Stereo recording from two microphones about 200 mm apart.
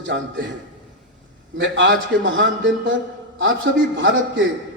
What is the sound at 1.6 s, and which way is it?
A man's voice, 65° right (ahead or behind).